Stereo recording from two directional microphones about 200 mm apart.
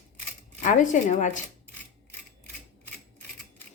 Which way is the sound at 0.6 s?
40° left (ahead or behind).